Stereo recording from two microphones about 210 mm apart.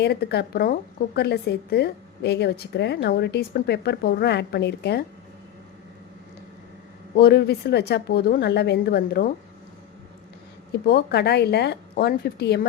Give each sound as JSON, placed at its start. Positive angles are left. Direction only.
{"t": 0.0, "sound": "a woman's voice", "side_deg": 50}
{"t": 7.2, "sound": "a woman's voice", "side_deg": 50}
{"t": 10.8, "sound": "a woman's voice", "side_deg": 50}